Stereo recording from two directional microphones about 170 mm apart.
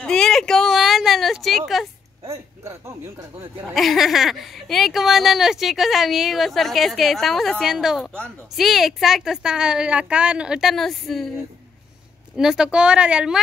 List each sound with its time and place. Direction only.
0.0 s a sound: 5° left (ahead or behind)
2.2 s speech: 20° right (ahead or behind)
3.7 s speech: centre (ahead or behind)
12.4 s speech: 5° right (ahead or behind)